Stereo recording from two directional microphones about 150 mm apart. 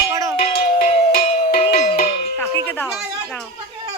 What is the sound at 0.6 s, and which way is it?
Music, 70° left (ahead or behind).